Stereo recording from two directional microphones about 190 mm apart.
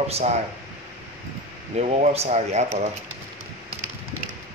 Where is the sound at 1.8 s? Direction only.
35° right (ahead or behind).